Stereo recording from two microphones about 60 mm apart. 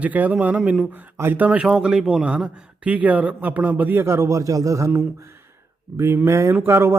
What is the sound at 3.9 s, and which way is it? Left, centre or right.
Speech, right.